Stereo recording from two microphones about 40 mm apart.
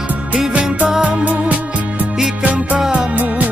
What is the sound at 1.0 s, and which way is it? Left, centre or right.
Music, right.